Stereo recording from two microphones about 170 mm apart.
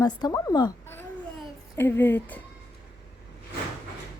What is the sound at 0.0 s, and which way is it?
Speech, 25° left (ahead or behind).